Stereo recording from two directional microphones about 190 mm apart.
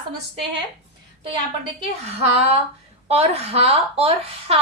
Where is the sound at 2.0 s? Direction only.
35° right (ahead or behind).